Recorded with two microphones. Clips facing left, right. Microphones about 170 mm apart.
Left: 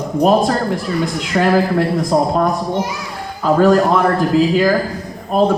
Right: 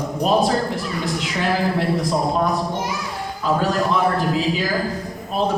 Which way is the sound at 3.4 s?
50° left (ahead or behind).